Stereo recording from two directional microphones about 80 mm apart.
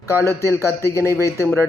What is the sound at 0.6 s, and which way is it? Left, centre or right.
Speech, left.